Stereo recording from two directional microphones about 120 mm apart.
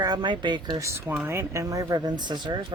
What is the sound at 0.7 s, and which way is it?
Speech, 25° right (ahead or behind).